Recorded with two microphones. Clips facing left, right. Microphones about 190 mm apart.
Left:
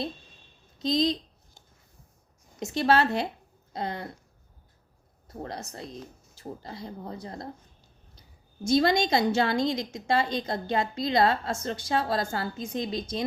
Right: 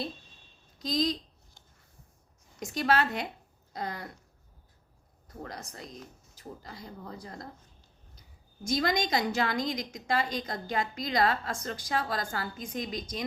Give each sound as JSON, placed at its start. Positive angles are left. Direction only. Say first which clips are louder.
{"t": 0.8, "sound": "a woman's voice", "louder": "left 4 dB", "side_deg": 25}
{"t": 2.6, "sound": "a woman's voice", "louder": "left 4 dB", "side_deg": 25}
{"t": 3.7, "sound": "a sound", "louder": "left 4 dB", "side_deg": 25}
{"t": 5.3, "sound": "a woman's voice", "louder": "left 5 dB", "side_deg": 30}
{"t": 8.6, "sound": "a woman's voice", "louder": "left 6 dB", "side_deg": 30}